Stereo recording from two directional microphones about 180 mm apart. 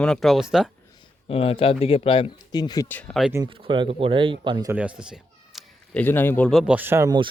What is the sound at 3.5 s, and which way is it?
Speech, 30° right (ahead or behind).